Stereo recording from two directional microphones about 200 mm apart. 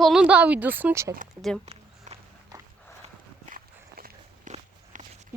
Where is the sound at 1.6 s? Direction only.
30° right (ahead or behind).